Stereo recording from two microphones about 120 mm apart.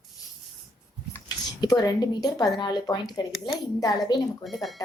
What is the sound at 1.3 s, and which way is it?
A woman's voice, 35° left (ahead or behind).